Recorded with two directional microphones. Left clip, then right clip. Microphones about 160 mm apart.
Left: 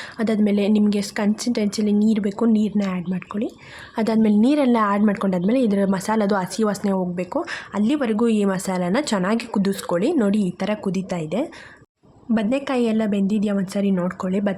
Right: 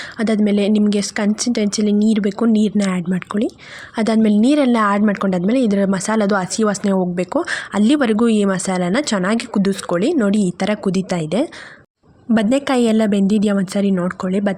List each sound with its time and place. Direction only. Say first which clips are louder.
0.2 s a woman's voice: right 3 dB; 20° right (ahead or behind)
3.9 s a woman's voice: right 3 dB; 20° right (ahead or behind)